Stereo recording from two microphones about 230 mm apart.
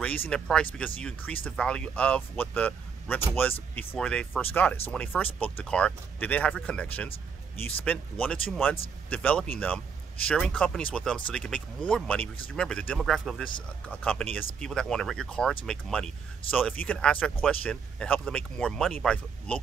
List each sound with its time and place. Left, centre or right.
0.0 s speech: centre